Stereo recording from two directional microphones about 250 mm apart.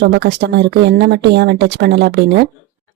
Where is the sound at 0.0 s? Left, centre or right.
Right.